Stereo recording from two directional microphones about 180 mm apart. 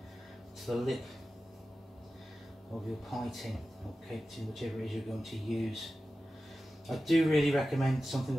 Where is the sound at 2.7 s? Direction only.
Centre (ahead or behind).